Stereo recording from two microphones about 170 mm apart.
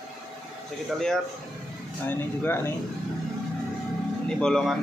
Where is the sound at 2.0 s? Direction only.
10° left (ahead or behind).